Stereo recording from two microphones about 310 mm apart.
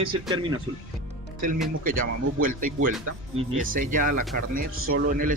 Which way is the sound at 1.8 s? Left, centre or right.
Right.